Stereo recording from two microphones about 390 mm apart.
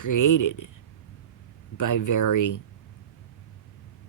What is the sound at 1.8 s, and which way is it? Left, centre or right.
Speech, left.